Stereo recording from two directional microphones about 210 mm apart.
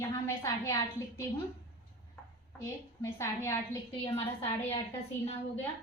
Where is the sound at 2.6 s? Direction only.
15° left (ahead or behind).